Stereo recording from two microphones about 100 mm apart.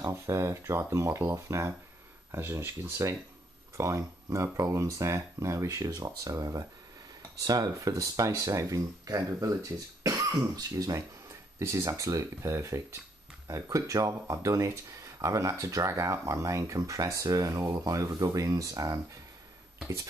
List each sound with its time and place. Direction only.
0.1 s speech: 30° right (ahead or behind)